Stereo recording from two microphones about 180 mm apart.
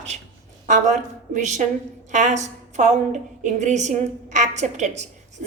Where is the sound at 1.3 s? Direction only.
40° right (ahead or behind).